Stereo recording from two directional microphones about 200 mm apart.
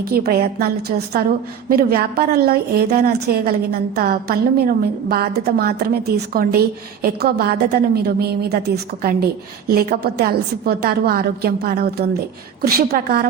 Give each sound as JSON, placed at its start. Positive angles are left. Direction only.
{"t": 0.3, "sound": "a woman's voice", "side_deg": -50}